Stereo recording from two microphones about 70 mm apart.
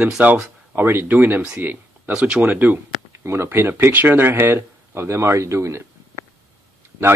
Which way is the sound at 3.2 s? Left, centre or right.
Right.